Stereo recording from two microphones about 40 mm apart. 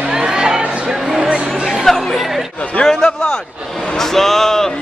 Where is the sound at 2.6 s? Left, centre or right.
Left.